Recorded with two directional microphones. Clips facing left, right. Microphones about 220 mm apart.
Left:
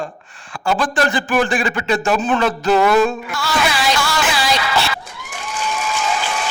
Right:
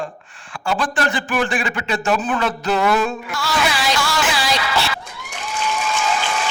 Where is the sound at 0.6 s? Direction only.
45° left (ahead or behind).